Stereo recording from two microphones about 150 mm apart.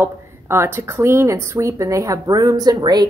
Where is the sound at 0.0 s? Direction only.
15° right (ahead or behind).